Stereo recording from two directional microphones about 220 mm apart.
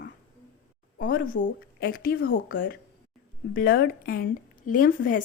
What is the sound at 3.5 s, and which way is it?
A woman's voice, 40° left (ahead or behind).